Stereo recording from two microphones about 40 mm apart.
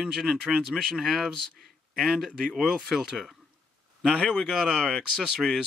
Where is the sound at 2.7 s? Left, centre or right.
Centre.